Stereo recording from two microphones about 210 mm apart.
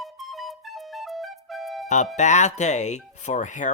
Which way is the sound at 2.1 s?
35° left (ahead or behind).